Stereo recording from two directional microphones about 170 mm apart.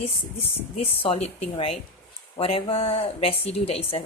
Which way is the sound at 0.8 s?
35° left (ahead or behind).